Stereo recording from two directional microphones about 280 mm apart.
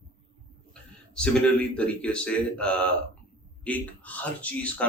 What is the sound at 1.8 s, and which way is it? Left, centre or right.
Speech, centre.